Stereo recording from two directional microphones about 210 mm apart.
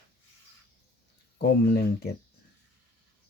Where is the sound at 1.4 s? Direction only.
50° left (ahead or behind).